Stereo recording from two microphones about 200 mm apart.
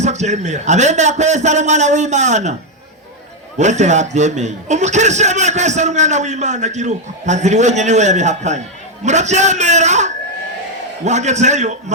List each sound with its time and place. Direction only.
0.0 s a man's voice: 35° right (ahead or behind)
3.6 s a man's voice: 35° right (ahead or behind)